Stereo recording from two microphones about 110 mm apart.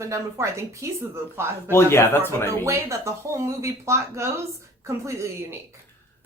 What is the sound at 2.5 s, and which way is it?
A woman's voice, 25° right (ahead or behind).